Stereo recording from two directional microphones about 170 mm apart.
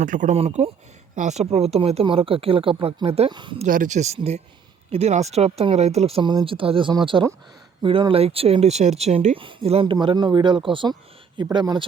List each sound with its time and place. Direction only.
0.0 s speech: 50° right (ahead or behind); by 3.7 s 30° right (ahead or behind)
3.7 s speech: 50° right (ahead or behind); by 11.9 s 25° right (ahead or behind)